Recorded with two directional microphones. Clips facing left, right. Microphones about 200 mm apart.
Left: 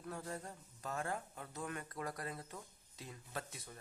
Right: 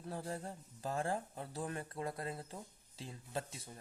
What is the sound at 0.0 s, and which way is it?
Speech, 30° right (ahead or behind).